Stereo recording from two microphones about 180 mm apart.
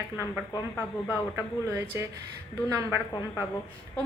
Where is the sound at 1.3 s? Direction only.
15° right (ahead or behind).